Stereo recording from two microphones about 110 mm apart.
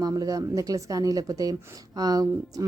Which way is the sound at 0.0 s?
35° right (ahead or behind).